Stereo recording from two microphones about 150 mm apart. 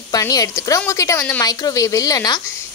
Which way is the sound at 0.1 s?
25° left (ahead or behind).